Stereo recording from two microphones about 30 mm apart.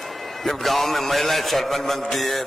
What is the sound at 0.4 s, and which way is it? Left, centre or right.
A man's voice, centre.